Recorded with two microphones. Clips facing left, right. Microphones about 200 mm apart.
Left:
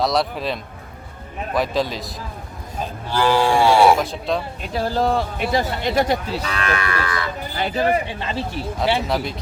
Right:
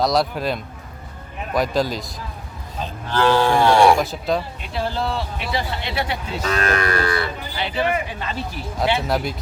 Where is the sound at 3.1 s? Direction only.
10° left (ahead or behind).